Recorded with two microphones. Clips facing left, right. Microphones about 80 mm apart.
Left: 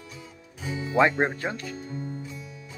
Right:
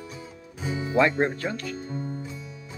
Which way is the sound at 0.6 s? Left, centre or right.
Right.